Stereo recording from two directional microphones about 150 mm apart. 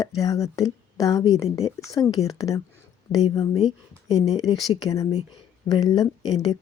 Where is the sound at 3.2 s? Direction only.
45° left (ahead or behind).